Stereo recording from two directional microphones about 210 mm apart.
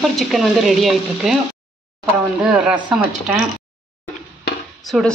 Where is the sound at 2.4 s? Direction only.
5° right (ahead or behind).